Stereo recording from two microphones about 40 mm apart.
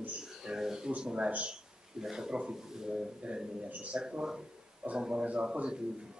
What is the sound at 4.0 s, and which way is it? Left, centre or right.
A man's voice, centre.